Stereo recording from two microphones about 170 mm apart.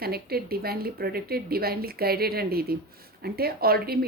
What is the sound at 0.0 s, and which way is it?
Speech, 65° right (ahead or behind).